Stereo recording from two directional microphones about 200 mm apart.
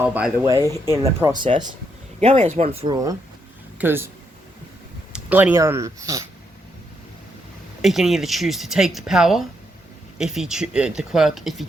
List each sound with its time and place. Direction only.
0.4 s speech: 15° right (ahead or behind)
5.1 s speech: 10° right (ahead or behind)
7.8 s speech: centre (ahead or behind)